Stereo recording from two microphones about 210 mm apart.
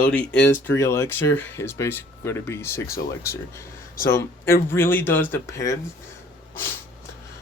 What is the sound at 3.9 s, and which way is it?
Speech, 40° left (ahead or behind).